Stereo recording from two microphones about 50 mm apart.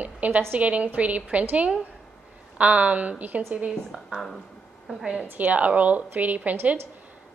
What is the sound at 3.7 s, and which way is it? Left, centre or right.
Speech, centre.